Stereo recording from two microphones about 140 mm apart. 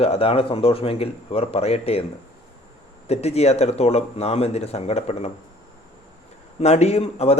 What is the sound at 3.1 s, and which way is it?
A man's voice, 50° left (ahead or behind).